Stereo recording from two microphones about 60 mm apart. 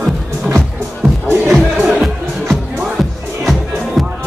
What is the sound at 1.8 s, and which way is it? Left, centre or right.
Music, centre.